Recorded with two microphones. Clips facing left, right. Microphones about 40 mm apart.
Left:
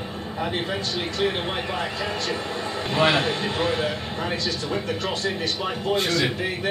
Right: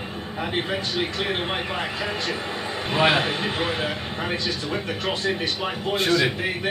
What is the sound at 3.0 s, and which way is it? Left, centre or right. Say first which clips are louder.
A man's voice: even; centre.